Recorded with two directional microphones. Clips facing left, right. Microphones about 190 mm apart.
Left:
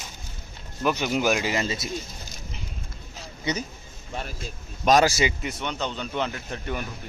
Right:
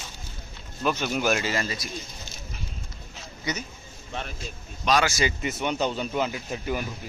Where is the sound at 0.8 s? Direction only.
15° left (ahead or behind).